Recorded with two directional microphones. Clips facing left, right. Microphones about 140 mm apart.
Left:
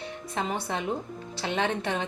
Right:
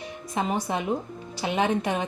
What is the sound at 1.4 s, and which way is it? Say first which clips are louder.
Speech: right 4 dB; 10° right (ahead or behind).